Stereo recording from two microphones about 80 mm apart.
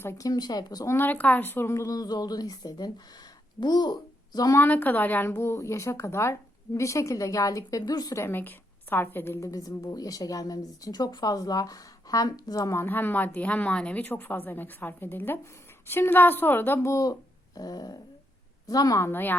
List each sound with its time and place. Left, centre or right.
0.0 s speech: left
0.3 s speech: left
0.9 s a child's voice: left
4.5 s a woman's voice: left
8.1 s a woman's voice: left
9.4 s a woman's voice: left
12.7 s a woman's voice: left
16.9 s a woman's voice: left
18.9 s a woman's voice: left